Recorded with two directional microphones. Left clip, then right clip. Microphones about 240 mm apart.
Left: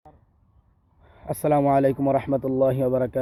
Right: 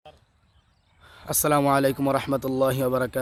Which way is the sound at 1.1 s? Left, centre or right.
Centre.